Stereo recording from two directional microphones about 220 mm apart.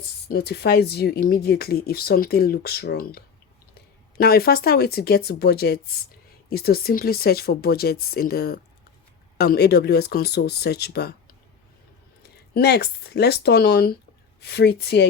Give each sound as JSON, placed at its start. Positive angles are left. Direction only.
{"t": 0.3, "sound": "speech", "side_deg": 45}
{"t": 12.5, "sound": "speech", "side_deg": 50}